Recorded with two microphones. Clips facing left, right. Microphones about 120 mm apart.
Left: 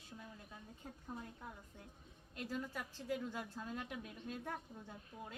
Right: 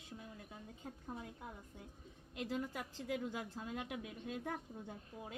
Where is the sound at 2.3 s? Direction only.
20° right (ahead or behind).